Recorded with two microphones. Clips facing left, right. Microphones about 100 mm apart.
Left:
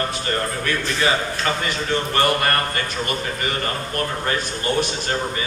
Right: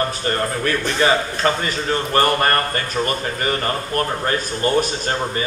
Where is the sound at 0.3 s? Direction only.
40° right (ahead or behind).